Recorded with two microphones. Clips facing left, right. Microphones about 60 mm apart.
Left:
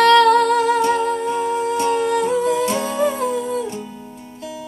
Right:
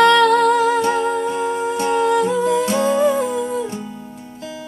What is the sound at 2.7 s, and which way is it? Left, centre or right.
Humming, centre.